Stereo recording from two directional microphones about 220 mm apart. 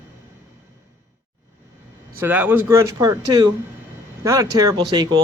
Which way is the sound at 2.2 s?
10° right (ahead or behind).